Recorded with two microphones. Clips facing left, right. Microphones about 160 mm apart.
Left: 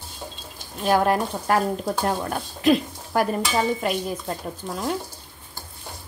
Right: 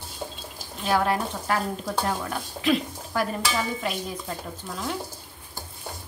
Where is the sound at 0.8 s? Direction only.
45° left (ahead or behind).